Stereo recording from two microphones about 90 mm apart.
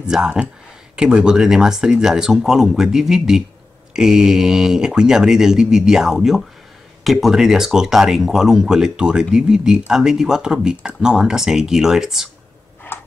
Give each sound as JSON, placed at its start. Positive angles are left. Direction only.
{"t": 0.0, "sound": "speech", "side_deg": -10}
{"t": 12.9, "sound": "tick-tock", "side_deg": 25}